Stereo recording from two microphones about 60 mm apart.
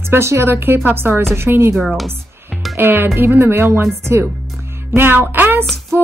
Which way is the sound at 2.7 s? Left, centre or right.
Right.